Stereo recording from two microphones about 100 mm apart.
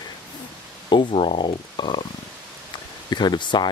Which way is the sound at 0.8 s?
55° left (ahead or behind).